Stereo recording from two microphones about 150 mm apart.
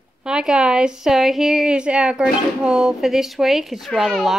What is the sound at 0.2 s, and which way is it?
A woman's voice, 5° right (ahead or behind).